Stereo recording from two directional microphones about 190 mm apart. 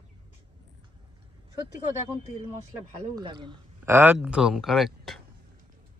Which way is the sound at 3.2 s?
25° right (ahead or behind).